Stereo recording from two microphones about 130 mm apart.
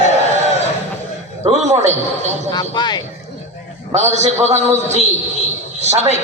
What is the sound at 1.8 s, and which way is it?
Speech, 60° right (ahead or behind).